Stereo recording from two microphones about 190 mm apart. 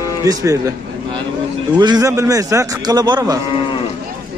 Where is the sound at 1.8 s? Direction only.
20° right (ahead or behind).